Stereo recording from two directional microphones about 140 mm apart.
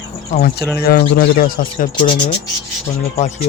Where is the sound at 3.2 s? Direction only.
55° left (ahead or behind).